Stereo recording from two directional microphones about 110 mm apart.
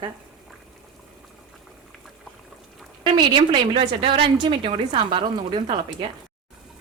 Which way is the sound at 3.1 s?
45° right (ahead or behind).